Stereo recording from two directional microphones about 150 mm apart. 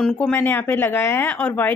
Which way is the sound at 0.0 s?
10° left (ahead or behind).